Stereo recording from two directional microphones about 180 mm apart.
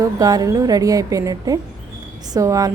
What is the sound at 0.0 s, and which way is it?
Speech, 20° right (ahead or behind).